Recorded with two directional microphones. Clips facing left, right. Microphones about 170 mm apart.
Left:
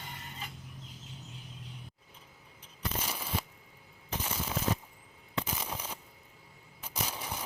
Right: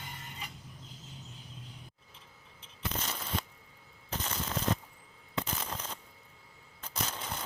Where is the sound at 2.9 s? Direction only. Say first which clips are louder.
Even; 10° left (ahead or behind).